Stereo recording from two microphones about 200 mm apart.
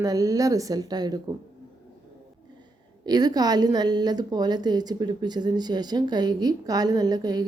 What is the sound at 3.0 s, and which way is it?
A woman's voice, 20° right (ahead or behind).